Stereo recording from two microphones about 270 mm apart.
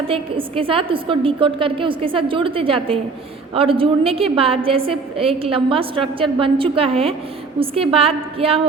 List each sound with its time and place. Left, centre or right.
0.1 s a woman's voice: centre